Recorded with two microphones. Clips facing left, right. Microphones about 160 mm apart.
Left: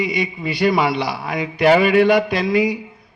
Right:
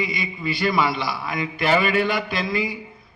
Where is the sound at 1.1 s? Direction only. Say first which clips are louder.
Left 3 dB; 70° left (ahead or behind).